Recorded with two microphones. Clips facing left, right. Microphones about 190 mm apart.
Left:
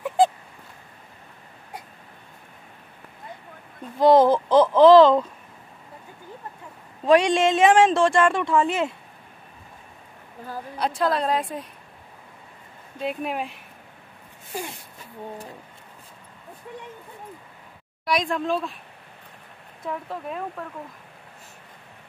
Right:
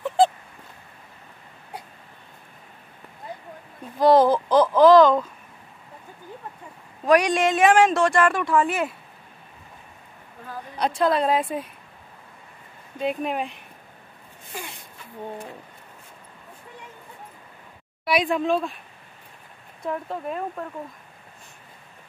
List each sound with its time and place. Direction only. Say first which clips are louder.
4.0 s speech: left 1 dB; 20° left (ahead or behind)
7.1 s speech: left 1 dB; 25° left (ahead or behind)
10.8 s a woman's voice: right 2 dB; centre (ahead or behind)
13.0 s a woman's voice: right 2 dB; centre (ahead or behind)
18.0 s a woman's voice: right 2 dB; 5° right (ahead or behind)
19.8 s a woman's voice: right 2 dB; centre (ahead or behind)